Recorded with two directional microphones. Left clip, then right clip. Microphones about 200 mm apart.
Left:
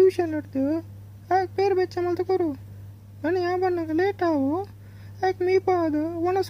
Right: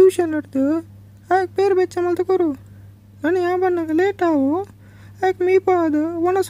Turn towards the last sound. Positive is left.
turn(degrees=-45)  # may be behind; listen again after turning